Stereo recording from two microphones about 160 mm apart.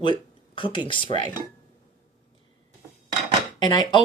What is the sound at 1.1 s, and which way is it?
Speech, 50° right (ahead or behind).